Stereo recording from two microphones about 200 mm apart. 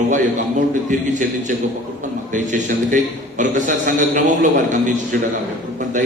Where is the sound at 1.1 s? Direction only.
40° right (ahead or behind).